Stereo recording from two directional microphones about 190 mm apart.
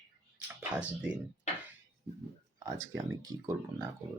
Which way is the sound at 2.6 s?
20° right (ahead or behind).